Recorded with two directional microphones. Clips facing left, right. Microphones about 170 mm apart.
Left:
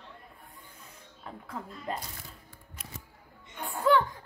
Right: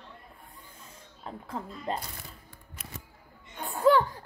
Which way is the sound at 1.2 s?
30° right (ahead or behind).